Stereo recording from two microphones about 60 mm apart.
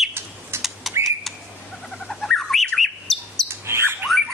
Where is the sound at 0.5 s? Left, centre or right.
Right.